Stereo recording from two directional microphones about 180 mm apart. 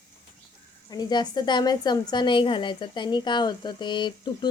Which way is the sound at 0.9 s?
25° left (ahead or behind).